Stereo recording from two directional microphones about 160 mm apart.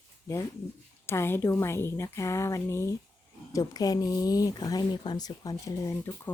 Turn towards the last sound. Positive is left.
turn(degrees=15)  # may be behind; listen again after turning